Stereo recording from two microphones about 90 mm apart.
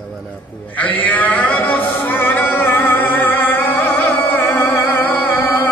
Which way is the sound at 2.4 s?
25° left (ahead or behind).